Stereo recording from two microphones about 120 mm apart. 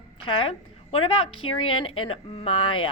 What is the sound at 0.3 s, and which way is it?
A woman's voice, 50° left (ahead or behind).